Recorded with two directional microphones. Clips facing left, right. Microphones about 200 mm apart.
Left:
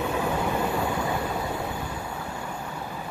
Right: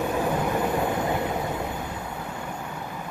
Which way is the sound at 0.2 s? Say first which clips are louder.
Right 2 dB; 15° right (ahead or behind).